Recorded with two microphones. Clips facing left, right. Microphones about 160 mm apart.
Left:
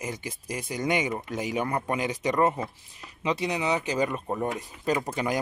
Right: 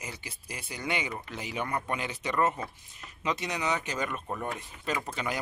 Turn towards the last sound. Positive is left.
turn(degrees=40)  # may be behind; listen again after turning